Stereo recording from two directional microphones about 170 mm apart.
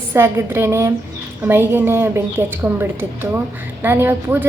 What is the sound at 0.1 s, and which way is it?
A woman's voice, 15° right (ahead or behind).